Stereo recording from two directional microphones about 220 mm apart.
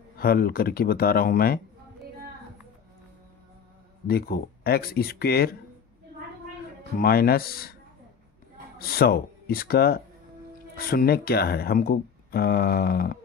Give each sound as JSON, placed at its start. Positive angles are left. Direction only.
{"t": 0.2, "sound": "speech", "side_deg": 45}
{"t": 4.1, "sound": "speech", "side_deg": 45}
{"t": 7.0, "sound": "speech", "side_deg": 45}
{"t": 8.7, "sound": "speech", "side_deg": 45}